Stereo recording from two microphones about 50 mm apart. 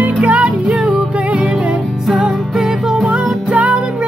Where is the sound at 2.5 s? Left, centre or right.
Centre.